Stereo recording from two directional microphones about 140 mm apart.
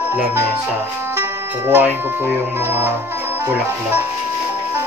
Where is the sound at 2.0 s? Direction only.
15° right (ahead or behind).